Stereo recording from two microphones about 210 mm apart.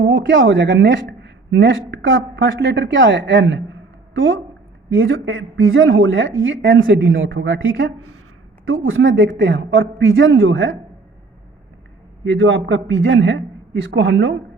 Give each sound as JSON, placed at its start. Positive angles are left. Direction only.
{"t": 0.0, "sound": "a woman's voice", "side_deg": -60}
{"t": 8.6, "sound": "a man's voice", "side_deg": -75}
{"t": 12.2, "sound": "a man's voice", "side_deg": -65}